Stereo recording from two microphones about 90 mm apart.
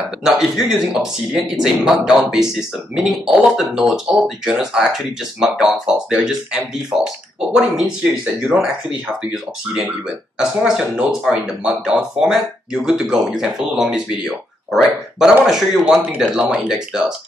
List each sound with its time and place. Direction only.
0.2 s speech: 5° right (ahead or behind)